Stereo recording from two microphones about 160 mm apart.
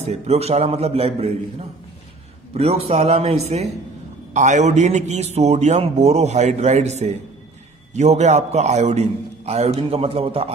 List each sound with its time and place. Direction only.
0.0 s a man's voice: 40° right (ahead or behind)